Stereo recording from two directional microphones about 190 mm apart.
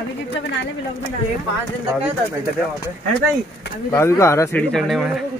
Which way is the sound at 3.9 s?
15° left (ahead or behind).